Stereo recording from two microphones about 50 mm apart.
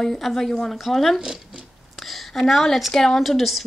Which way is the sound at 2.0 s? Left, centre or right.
Centre.